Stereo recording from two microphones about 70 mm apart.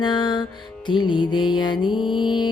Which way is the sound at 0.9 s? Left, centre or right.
Left.